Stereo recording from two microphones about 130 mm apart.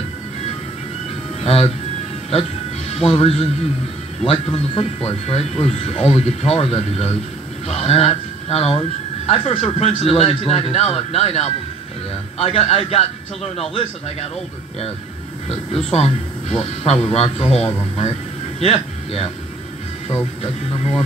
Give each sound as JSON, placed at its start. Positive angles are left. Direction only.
{"t": 1.4, "sound": "speech", "side_deg": 50}
{"t": 2.9, "sound": "speech", "side_deg": 50}
{"t": 15.4, "sound": "speech", "side_deg": 50}
{"t": 20.7, "sound": "speech", "side_deg": 45}